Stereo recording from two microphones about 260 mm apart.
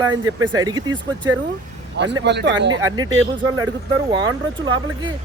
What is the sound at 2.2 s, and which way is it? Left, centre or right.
Speech, right.